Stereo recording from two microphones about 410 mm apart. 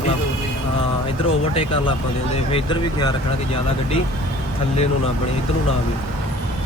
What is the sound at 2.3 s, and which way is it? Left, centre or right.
Speech, centre.